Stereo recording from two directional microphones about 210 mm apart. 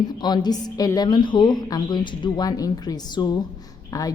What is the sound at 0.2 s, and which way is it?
A woman's voice, 20° left (ahead or behind).